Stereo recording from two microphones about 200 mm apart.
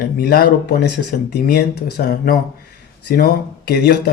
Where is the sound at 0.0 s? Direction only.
50° left (ahead or behind).